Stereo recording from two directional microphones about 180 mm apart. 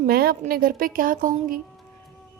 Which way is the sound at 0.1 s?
55° right (ahead or behind).